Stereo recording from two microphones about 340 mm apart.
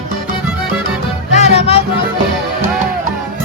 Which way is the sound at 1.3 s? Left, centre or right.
Centre.